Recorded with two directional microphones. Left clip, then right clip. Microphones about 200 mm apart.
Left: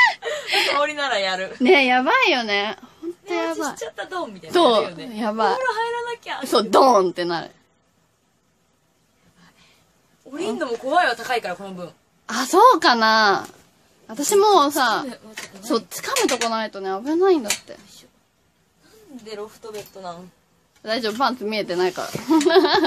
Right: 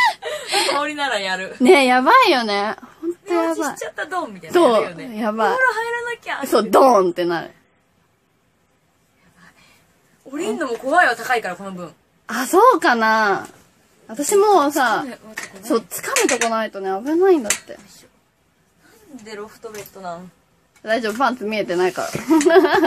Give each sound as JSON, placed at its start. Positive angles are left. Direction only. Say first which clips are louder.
{"t": 0.5, "sound": "chuckle", "louder": "even", "side_deg": -15}
{"t": 0.8, "sound": "speech", "louder": "even", "side_deg": 10}
{"t": 1.6, "sound": "speech", "louder": "right 3 dB", "side_deg": -20}
{"t": 2.7, "sound": "a woman's voice", "louder": "right 5 dB", "side_deg": 0}
{"t": 4.5, "sound": "a woman's voice", "louder": "right 2 dB", "side_deg": -5}
{"t": 5.6, "sound": "a sound", "louder": "right 4 dB", "side_deg": 15}
{"t": 6.5, "sound": "speech", "louder": "right 2 dB", "side_deg": -10}
{"t": 10.3, "sound": "speech", "louder": "right 2 dB", "side_deg": 5}
{"t": 12.3, "sound": "a woman's voice", "louder": "even", "side_deg": 0}
{"t": 19.2, "sound": "speech", "louder": "right 1 dB", "side_deg": 15}
{"t": 20.8, "sound": "speech", "louder": "right 3 dB", "side_deg": -5}